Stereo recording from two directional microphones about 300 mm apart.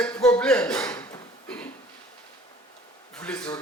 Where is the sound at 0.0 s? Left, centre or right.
Centre.